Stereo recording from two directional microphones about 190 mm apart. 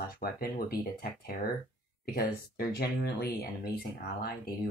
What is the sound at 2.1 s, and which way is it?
Speech, 55° left (ahead or behind).